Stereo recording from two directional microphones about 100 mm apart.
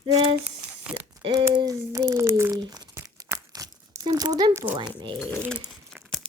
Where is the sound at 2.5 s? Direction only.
45° right (ahead or behind).